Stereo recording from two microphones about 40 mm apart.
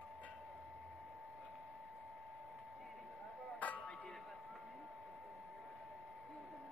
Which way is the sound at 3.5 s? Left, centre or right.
Left.